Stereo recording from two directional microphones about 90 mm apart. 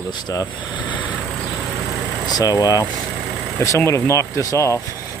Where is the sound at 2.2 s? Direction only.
45° left (ahead or behind).